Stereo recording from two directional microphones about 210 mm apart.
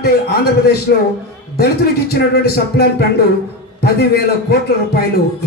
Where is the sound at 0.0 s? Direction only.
50° left (ahead or behind).